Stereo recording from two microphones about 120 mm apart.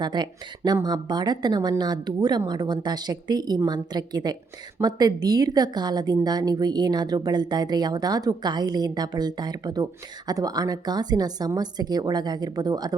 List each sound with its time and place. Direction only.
0.0 s a woman's voice: 40° right (ahead or behind)